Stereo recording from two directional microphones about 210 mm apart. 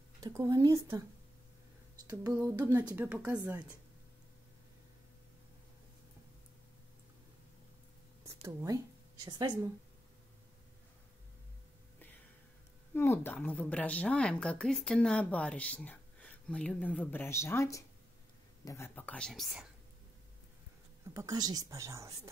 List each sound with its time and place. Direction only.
0.2 s a woman's voice: 15° right (ahead or behind)
2.0 s a woman's voice: 15° right (ahead or behind)
8.5 s a woman's voice: 15° right (ahead or behind)
12.9 s a woman's voice: 10° left (ahead or behind)
21.1 s a woman's voice: 15° right (ahead or behind)